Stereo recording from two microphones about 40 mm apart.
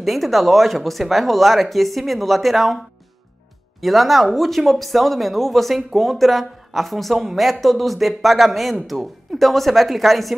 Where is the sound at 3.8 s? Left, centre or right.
Centre.